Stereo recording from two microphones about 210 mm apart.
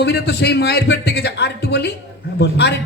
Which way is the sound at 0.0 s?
55° left (ahead or behind).